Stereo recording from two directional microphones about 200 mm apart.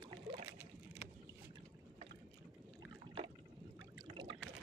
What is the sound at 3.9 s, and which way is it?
Boat, 25° right (ahead or behind).